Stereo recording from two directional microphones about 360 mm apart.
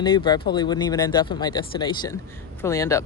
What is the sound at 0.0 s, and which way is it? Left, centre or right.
Speech, centre.